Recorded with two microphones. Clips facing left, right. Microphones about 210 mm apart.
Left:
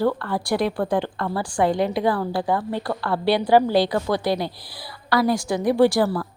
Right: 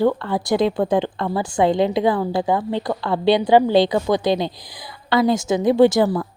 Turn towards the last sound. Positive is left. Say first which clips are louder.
# right 3 dB
turn(degrees=-20)  # may be behind; listen again after turning